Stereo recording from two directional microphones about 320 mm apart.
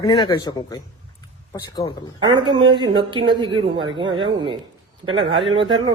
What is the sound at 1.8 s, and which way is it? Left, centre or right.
Speech, centre.